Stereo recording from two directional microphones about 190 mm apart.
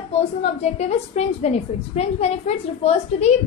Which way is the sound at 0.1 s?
35° left (ahead or behind).